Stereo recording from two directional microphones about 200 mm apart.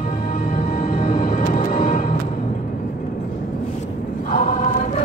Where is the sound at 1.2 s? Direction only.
40° left (ahead or behind).